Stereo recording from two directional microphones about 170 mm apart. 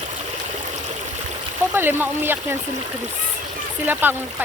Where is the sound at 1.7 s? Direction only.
10° right (ahead or behind).